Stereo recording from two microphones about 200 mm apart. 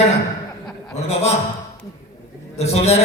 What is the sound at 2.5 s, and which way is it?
Speech, 30° left (ahead or behind).